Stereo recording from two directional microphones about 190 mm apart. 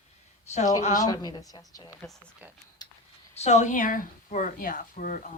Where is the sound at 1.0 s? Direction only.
20° left (ahead or behind).